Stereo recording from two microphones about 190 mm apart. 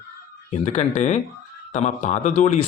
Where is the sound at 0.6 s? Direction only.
35° left (ahead or behind).